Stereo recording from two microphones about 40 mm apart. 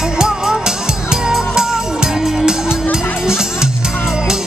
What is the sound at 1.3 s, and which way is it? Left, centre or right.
Music, centre.